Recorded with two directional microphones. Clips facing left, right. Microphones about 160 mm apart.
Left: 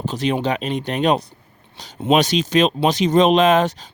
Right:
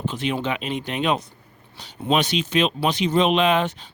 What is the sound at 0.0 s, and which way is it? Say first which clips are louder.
Speech: left 4 dB; 40° left (ahead or behind).